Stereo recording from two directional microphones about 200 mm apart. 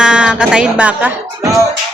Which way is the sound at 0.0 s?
5° right (ahead or behind).